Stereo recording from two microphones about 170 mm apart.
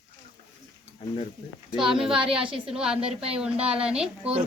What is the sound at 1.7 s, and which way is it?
Speech, 5° right (ahead or behind).